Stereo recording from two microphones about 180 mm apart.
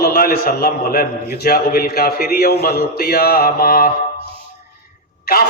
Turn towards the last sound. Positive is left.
turn(degrees=55)  # may be behind; listen again after turning